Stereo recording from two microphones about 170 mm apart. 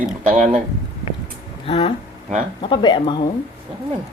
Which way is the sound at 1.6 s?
35° left (ahead or behind).